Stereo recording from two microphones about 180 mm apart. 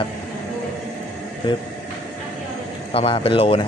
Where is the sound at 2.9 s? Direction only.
35° left (ahead or behind).